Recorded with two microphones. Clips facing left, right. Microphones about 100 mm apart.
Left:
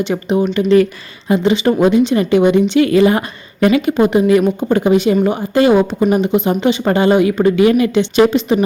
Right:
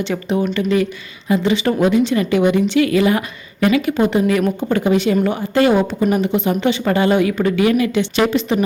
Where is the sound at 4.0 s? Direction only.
20° left (ahead or behind).